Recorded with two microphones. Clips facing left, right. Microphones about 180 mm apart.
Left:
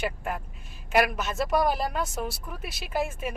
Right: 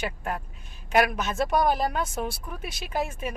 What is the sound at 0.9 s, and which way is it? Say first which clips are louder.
A woman's voice: right 1 dB; centre (ahead or behind).